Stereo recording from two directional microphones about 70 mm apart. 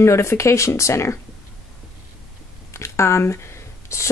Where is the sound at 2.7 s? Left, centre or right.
Left.